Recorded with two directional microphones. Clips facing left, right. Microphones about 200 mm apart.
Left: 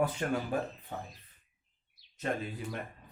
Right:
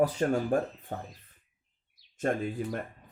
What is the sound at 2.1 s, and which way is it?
Speech, 50° right (ahead or behind).